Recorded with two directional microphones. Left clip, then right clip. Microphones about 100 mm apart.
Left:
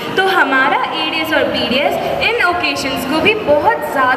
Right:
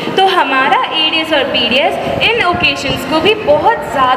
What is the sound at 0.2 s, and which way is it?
A woman's voice, 15° left (ahead or behind).